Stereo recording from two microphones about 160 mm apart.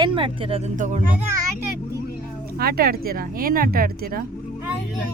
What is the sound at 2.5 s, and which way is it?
Speech, 70° right (ahead or behind).